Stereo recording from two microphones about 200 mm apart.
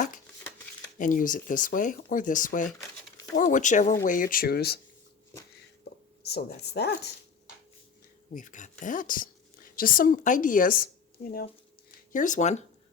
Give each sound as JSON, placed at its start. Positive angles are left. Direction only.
{"t": 0.9, "sound": "speech", "side_deg": 40}
{"t": 6.2, "sound": "speech", "side_deg": 55}
{"t": 8.3, "sound": "a woman's voice", "side_deg": 40}
{"t": 12.1, "sound": "speech", "side_deg": 40}